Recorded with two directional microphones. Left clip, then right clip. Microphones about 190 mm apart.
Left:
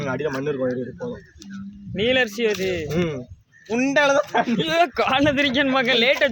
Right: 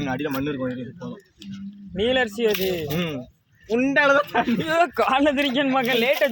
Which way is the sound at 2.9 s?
35° left (ahead or behind).